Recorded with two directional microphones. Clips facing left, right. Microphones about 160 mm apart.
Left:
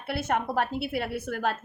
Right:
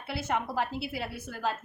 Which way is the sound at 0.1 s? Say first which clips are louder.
Left 4 dB; 55° left (ahead or behind).